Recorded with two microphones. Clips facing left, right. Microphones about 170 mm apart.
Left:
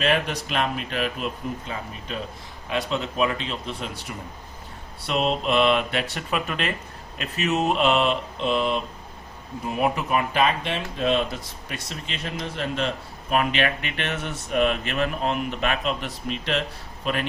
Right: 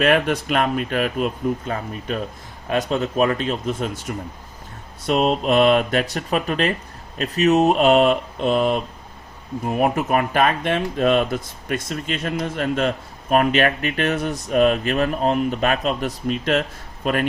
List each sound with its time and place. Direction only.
0.0 s speech: 55° right (ahead or behind)